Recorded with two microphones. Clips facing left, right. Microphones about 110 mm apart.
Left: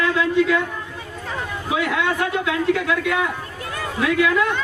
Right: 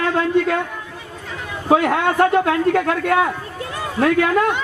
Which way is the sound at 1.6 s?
45° right (ahead or behind).